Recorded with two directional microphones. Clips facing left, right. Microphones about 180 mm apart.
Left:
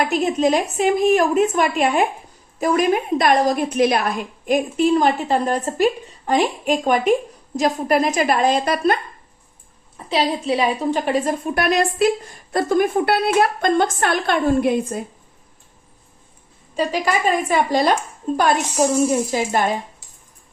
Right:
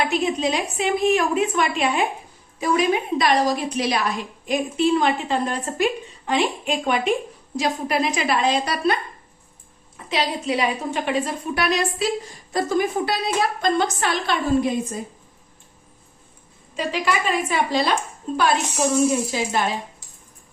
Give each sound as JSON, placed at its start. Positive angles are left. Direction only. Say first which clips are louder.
{"t": 0.0, "sound": "a woman's voice", "louder": "left 4 dB", "side_deg": 45}
{"t": 10.1, "sound": "a woman's voice", "louder": "left 4 dB", "side_deg": 35}
{"t": 16.7, "sound": "a woman's voice", "louder": "left 3 dB", "side_deg": 40}
{"t": 19.3, "sound": "a woman's voice", "louder": "left 4 dB", "side_deg": 50}